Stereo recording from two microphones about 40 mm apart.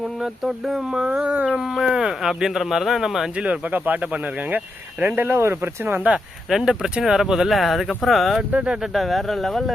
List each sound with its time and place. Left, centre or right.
0.2 s speech: centre
0.9 s speech: right
3.3 s speech: right
3.7 s speech: right
5.3 s speech: right
6.5 s speech: centre
8.4 s speech: right
8.9 s speech: centre